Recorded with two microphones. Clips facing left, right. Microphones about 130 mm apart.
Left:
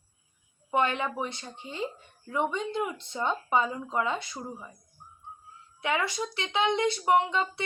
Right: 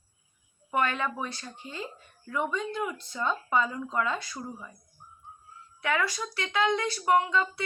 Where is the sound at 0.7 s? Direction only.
20° left (ahead or behind).